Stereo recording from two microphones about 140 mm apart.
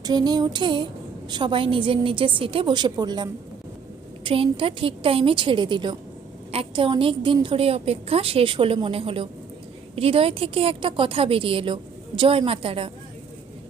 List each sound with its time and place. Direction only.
0.0 s a woman's voice: 30° right (ahead or behind)